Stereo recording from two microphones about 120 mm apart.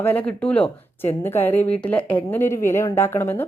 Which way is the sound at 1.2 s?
20° left (ahead or behind).